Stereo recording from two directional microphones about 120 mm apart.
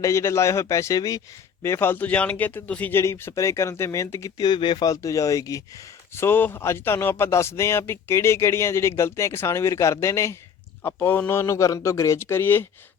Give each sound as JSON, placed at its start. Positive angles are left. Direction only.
{"t": 0.0, "sound": "speech", "side_deg": 25}
{"t": 4.4, "sound": "speech", "side_deg": 40}
{"t": 4.9, "sound": "speech", "side_deg": 25}